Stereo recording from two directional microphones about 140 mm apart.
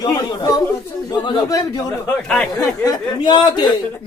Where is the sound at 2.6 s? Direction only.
25° left (ahead or behind).